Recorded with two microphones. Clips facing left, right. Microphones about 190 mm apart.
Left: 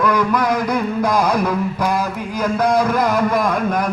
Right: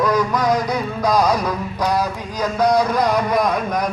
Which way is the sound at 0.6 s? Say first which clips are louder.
Left 2 dB; 55° left (ahead or behind).